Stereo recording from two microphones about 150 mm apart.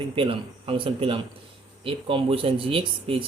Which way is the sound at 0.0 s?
35° right (ahead or behind).